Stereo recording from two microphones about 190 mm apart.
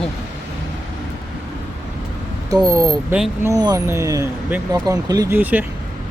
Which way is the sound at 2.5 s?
15° right (ahead or behind).